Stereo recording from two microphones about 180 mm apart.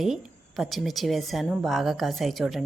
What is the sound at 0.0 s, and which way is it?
A woman's voice, centre (ahead or behind).